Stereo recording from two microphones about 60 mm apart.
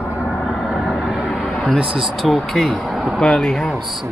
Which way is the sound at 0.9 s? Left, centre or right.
Centre.